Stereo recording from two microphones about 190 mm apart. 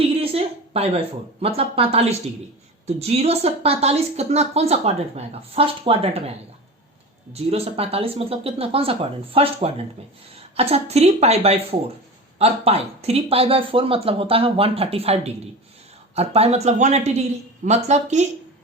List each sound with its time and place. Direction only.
0.2 s a woman's voice: 30° right (ahead or behind)
7.3 s a woman's voice: 30° right (ahead or behind)